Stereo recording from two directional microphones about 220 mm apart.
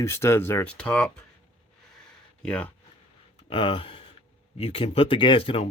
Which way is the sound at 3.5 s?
25° left (ahead or behind).